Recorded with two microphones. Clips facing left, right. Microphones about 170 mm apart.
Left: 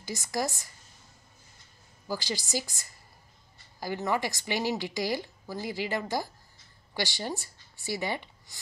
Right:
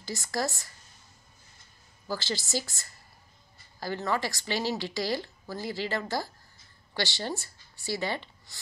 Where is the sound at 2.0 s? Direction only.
15° left (ahead or behind).